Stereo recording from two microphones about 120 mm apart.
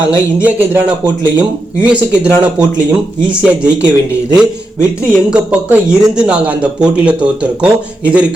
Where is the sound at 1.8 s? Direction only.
10° right (ahead or behind).